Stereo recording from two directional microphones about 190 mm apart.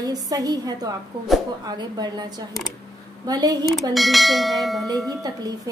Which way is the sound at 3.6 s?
Centre (ahead or behind).